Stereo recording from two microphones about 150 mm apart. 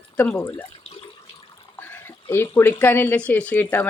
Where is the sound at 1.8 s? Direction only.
15° left (ahead or behind).